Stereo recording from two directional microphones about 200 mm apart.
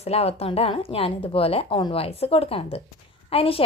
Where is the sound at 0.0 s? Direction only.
30° left (ahead or behind).